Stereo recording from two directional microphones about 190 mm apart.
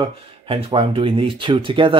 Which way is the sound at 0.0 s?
30° right (ahead or behind).